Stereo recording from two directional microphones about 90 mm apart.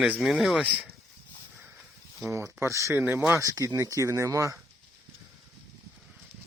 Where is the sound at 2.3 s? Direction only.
35° right (ahead or behind).